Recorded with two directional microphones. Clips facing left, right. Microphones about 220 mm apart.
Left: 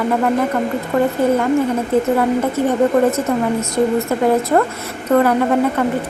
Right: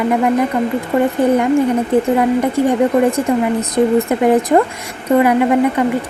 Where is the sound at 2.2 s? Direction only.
15° right (ahead or behind).